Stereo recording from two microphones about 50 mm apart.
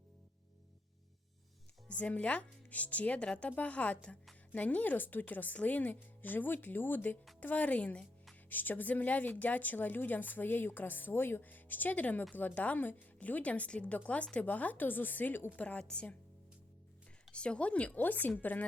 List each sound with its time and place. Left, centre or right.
1.9 s speech: left
3.5 s speech: left
7.4 s speech: left
8.4 s speech: left
15.4 s speech: left
17.3 s speech: left